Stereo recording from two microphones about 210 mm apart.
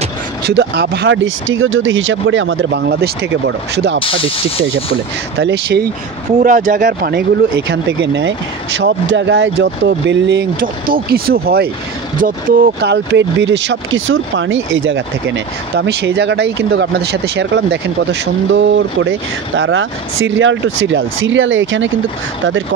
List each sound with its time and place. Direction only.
0.5 s speech: 50° right (ahead or behind)
5.4 s speech: 50° right (ahead or behind)
6.4 s speech: 40° right (ahead or behind); by 21.9 s 65° right (ahead or behind)